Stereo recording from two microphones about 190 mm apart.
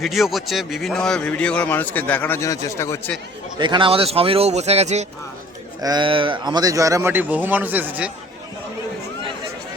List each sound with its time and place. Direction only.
0.0 s a man's voice: centre (ahead or behind); by 3.0 s 15° left (ahead or behind)
3.6 s a man's voice: 25° right (ahead or behind)
5.8 s speech: 25° right (ahead or behind)